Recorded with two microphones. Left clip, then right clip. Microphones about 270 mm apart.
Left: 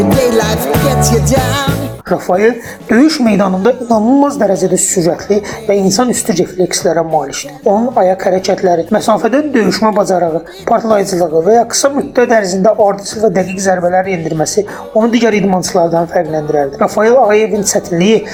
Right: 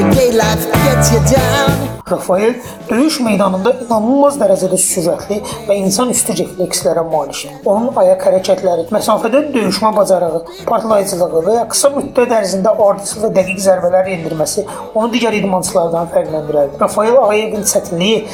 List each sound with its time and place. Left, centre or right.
0.0 s music: centre
2.0 s a woman's voice: left